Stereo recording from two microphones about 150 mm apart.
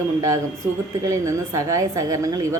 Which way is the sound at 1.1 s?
20° right (ahead or behind).